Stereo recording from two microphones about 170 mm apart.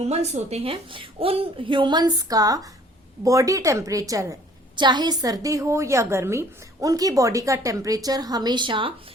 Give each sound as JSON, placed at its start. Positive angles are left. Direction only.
{"t": 0.0, "sound": "a woman's voice", "side_deg": -40}